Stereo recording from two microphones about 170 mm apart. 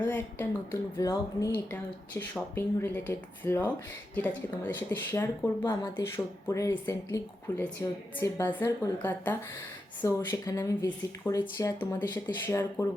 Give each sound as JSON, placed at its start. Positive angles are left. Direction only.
{"t": 0.0, "sound": "a woman's voice", "side_deg": 10}